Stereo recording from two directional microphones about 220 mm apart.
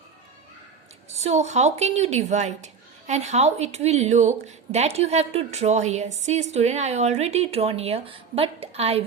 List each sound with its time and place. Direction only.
1.1 s a woman's voice: 30° right (ahead or behind)